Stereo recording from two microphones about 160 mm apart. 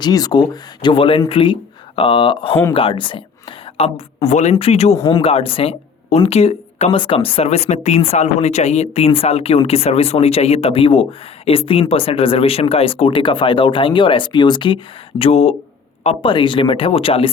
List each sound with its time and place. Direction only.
0.0 s speech: 25° left (ahead or behind); by 4.9 s 40° left (ahead or behind)
4.9 s speech: 30° left (ahead or behind)